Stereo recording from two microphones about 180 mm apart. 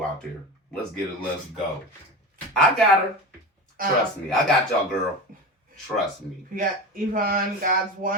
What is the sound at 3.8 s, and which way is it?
Speech, 50° right (ahead or behind).